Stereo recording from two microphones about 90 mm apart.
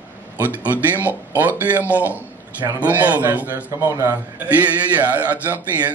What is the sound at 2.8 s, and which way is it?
A man's voice, 20° right (ahead or behind).